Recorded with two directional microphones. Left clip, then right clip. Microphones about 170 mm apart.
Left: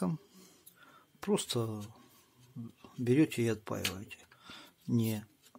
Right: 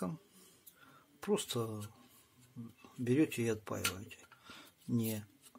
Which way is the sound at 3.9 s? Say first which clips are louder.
Left 3 dB; 25° left (ahead or behind).